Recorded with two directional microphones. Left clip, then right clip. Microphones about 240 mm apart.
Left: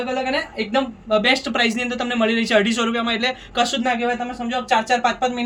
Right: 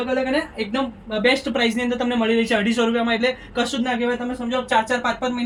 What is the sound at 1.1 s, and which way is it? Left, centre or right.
Speech, left.